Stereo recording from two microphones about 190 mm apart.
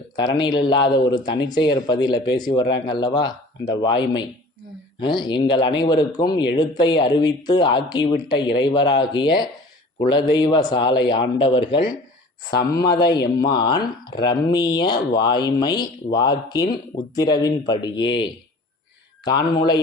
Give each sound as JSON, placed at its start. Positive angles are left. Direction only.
{"t": 0.2, "sound": "speech", "side_deg": 25}
{"t": 12.7, "sound": "speech", "side_deg": 55}
{"t": 13.0, "sound": "speech", "side_deg": 20}
{"t": 19.2, "sound": "speech", "side_deg": 20}